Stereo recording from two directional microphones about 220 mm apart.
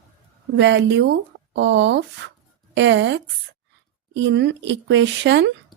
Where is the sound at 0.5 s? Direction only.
55° right (ahead or behind).